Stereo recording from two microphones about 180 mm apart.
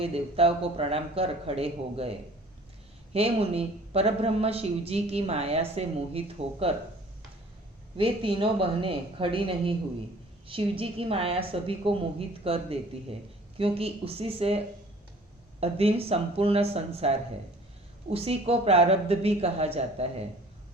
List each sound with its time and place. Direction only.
0.0 s speech: 30° right (ahead or behind)
7.9 s a woman's voice: 30° right (ahead or behind)
15.6 s speech: 35° right (ahead or behind)